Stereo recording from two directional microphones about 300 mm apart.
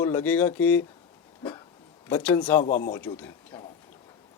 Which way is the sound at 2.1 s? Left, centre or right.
Centre.